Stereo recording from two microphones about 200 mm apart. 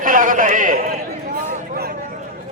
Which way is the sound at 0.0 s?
45° right (ahead or behind).